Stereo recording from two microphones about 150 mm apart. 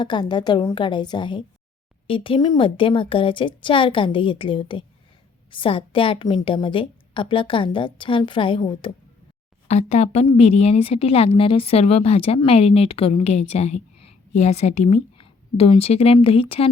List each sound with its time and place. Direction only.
0.0 s a woman's voice: 30° left (ahead or behind)
9.6 s a woman's voice: 50° left (ahead or behind)